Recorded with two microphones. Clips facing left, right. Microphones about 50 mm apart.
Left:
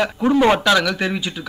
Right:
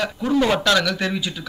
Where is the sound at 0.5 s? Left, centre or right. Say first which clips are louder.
Left 2 dB; centre.